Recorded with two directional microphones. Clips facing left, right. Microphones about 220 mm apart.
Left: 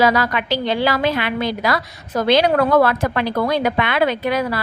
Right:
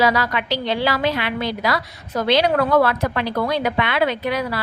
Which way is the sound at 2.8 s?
50° left (ahead or behind).